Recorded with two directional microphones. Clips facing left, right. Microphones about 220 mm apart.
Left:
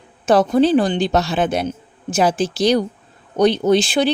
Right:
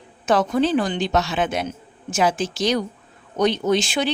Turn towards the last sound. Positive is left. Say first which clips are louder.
# left 5 dB
turn(degrees=35)  # may be behind; listen again after turning